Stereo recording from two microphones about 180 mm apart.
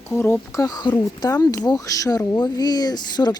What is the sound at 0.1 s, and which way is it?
Speech, 15° left (ahead or behind).